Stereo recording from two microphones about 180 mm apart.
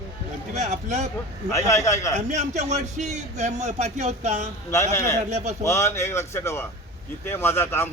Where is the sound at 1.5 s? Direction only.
15° left (ahead or behind).